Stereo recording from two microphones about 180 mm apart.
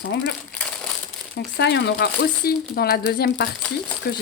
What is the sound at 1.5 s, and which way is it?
Speech, 70° left (ahead or behind).